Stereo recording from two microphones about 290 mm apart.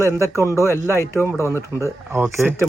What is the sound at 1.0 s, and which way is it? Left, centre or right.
Speech, centre.